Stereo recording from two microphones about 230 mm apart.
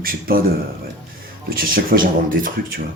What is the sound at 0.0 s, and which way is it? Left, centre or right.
Speech, right.